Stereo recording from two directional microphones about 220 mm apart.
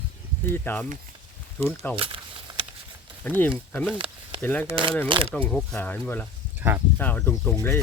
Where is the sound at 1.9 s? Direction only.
25° right (ahead or behind).